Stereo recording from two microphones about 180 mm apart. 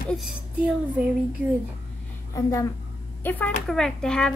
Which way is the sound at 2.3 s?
15° left (ahead or behind).